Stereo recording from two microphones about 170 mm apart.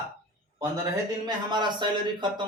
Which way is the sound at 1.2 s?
25° right (ahead or behind).